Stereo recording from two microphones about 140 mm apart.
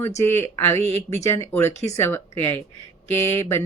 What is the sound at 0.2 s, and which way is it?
Speech, 15° left (ahead or behind).